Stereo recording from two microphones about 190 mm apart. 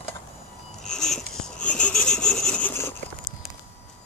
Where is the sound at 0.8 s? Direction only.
5° left (ahead or behind).